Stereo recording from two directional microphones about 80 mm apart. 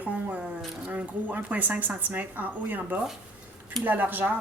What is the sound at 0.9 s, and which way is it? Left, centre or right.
A woman's voice, centre.